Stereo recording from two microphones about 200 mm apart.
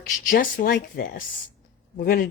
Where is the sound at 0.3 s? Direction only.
45° left (ahead or behind).